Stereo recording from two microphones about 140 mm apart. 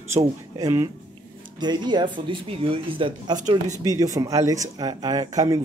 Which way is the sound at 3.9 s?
25° right (ahead or behind).